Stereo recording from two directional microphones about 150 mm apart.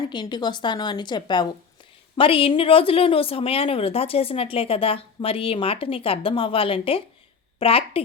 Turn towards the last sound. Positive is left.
turn(degrees=40)  # may be behind; listen again after turning